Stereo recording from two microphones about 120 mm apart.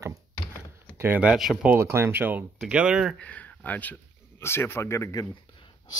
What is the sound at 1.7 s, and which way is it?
Speech, 20° right (ahead or behind).